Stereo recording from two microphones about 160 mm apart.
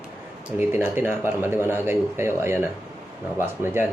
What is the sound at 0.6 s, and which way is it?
Speech, 15° right (ahead or behind).